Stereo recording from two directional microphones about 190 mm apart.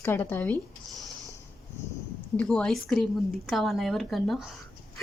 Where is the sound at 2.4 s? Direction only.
5° left (ahead or behind).